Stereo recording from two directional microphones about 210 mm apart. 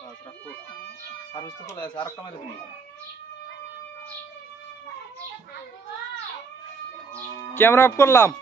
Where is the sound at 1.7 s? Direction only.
20° left (ahead or behind).